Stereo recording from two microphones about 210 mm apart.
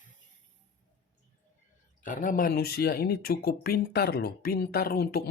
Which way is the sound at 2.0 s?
40° left (ahead or behind).